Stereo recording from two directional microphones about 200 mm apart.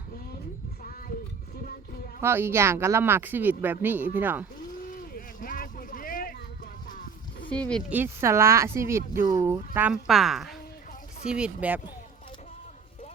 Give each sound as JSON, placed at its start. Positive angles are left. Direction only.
{"t": 0.8, "sound": "child singing", "side_deg": 45}
{"t": 2.2, "sound": "speech", "side_deg": -10}
{"t": 5.1, "sound": "a sound", "side_deg": 45}
{"t": 6.8, "sound": "music", "side_deg": 45}
{"t": 7.5, "sound": "speech", "side_deg": 5}
{"t": 7.9, "sound": "speech", "side_deg": -10}
{"t": 9.7, "sound": "speech", "side_deg": -5}